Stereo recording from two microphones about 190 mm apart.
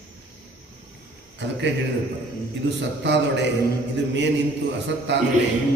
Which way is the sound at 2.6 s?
70° right (ahead or behind).